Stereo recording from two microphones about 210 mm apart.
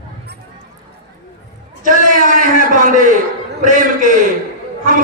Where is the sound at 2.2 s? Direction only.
40° right (ahead or behind).